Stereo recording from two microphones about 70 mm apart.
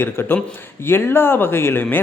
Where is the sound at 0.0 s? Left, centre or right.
Left.